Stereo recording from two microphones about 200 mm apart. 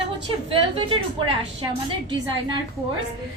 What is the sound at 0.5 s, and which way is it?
Speech, 25° right (ahead or behind).